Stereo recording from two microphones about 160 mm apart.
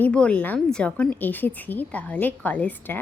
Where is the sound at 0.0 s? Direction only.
5° left (ahead or behind).